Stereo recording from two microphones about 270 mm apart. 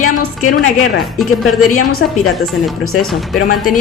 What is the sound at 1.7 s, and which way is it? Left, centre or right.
Speech, left.